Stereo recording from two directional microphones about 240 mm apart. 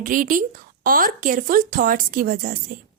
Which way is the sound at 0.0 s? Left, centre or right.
Right.